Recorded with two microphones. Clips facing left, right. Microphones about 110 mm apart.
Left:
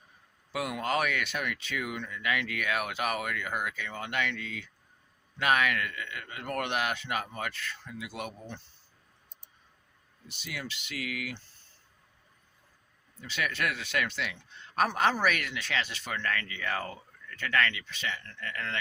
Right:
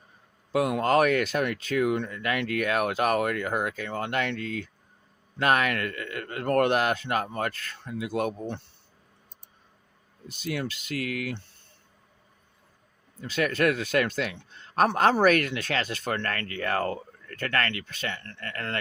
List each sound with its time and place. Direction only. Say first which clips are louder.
0.5 s speech: right 8 dB; 40° right (ahead or behind); by 8.7 s 60° right (ahead or behind)
10.2 s speech: right 9 dB; 50° right (ahead or behind)
13.1 s speech: right 8 dB; 40° right (ahead or behind)
14.5 s a sound: right 5 dB; 40° right (ahead or behind)
15.2 s speech: right 8 dB; 45° right (ahead or behind)